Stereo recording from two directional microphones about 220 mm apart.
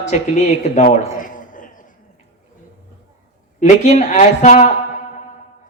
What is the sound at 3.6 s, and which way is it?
Speech, 30° left (ahead or behind).